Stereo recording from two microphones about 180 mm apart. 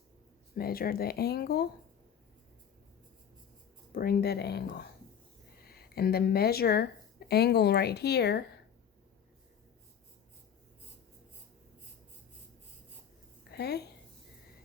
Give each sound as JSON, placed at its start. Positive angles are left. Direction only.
{"t": 0.5, "sound": "speech", "side_deg": 55}
{"t": 3.9, "sound": "speech", "side_deg": 60}
{"t": 13.5, "sound": "a woman's voice", "side_deg": 65}